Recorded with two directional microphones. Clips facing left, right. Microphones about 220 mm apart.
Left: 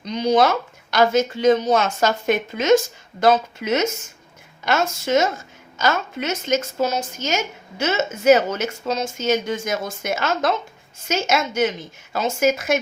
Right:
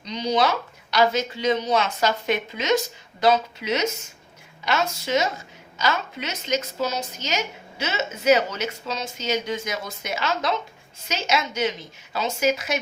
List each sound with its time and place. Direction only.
0.0 s a woman's voice: 50° left (ahead or behind)